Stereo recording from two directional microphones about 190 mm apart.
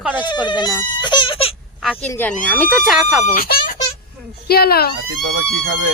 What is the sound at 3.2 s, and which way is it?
Speech, 45° left (ahead or behind).